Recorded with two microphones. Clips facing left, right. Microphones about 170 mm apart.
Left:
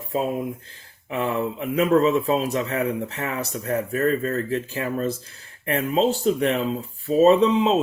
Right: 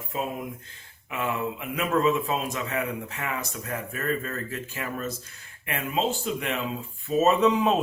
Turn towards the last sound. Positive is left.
turn(degrees=25)  # may be behind; listen again after turning